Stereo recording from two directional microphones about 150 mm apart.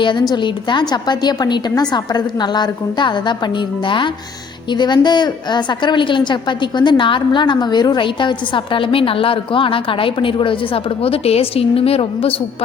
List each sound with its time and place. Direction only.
0.0 s a woman's voice: 30° left (ahead or behind)